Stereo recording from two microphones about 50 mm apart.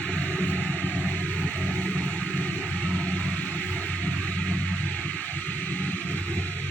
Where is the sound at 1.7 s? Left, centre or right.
Left.